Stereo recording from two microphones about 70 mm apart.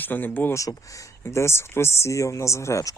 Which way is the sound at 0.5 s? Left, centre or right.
Left.